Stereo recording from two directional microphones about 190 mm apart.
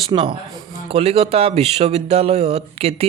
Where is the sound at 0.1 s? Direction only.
25° right (ahead or behind).